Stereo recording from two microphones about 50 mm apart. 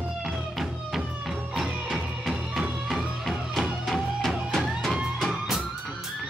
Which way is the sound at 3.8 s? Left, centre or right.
Centre.